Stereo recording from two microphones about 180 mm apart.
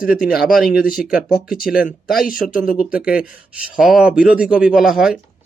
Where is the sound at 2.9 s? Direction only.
5° right (ahead or behind).